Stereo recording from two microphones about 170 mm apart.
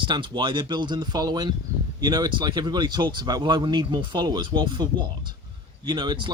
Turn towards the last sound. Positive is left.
turn(degrees=-25)  # may be behind; listen again after turning